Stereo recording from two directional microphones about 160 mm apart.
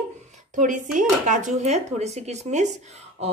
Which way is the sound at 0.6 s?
50° right (ahead or behind).